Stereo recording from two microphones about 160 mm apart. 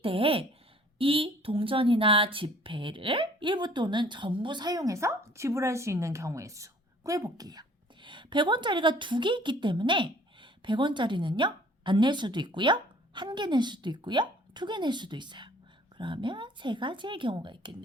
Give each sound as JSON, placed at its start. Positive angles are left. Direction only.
{"t": 0.0, "sound": "speech", "side_deg": -35}